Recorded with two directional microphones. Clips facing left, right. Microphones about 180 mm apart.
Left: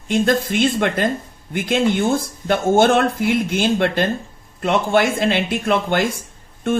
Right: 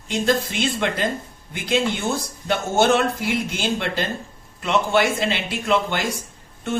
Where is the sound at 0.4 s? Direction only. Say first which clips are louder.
Left 5 dB; 50° left (ahead or behind).